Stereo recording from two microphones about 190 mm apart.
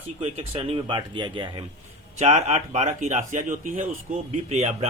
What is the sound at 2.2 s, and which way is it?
Speech, 35° right (ahead or behind).